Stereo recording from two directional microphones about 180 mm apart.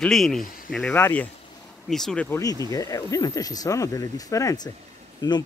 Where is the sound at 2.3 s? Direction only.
20° left (ahead or behind).